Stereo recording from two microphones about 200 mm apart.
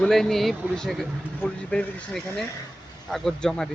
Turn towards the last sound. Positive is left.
turn(degrees=5)  # may be behind; listen again after turning